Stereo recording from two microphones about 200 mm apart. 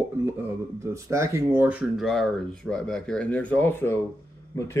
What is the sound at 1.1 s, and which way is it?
A man's voice, 15° right (ahead or behind).